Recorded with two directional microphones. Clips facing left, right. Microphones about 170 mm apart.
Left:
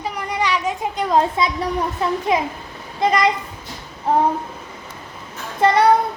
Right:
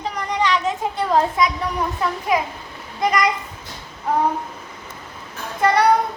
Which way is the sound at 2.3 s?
25° left (ahead or behind).